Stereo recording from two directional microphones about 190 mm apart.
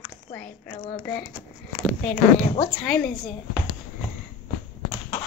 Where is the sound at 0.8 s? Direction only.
25° left (ahead or behind).